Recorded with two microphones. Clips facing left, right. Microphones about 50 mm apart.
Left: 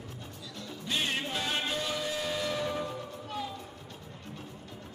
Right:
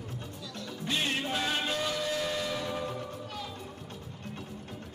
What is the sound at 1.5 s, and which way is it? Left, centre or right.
Music, centre.